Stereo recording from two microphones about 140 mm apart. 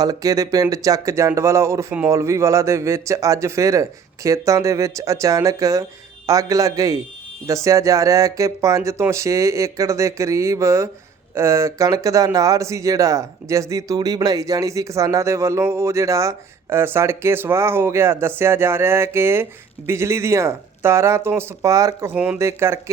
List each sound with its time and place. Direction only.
0.0 s speech: 25° right (ahead or behind)